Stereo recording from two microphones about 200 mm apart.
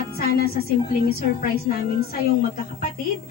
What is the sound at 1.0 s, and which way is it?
Speech, 50° left (ahead or behind).